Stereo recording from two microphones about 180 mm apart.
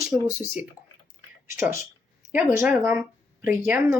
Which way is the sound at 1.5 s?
15° right (ahead or behind).